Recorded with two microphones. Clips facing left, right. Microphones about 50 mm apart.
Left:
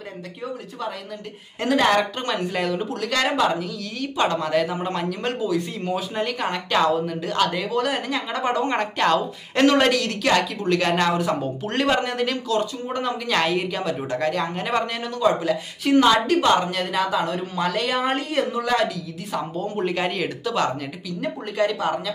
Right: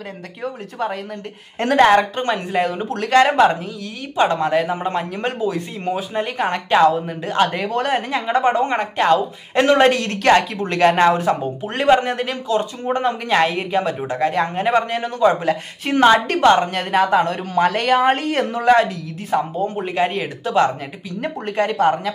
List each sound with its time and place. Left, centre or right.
0.4 s speech: right
1.9 s a woman's voice: right
2.9 s a woman's voice: right